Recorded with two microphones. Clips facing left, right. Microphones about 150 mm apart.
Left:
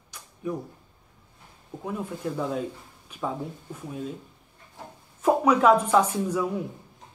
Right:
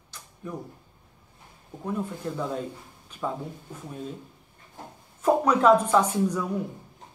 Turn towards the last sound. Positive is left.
turn(degrees=5)  # may be behind; listen again after turning